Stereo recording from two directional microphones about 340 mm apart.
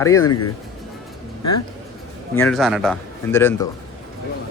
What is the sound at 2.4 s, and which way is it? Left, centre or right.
A man's voice, centre.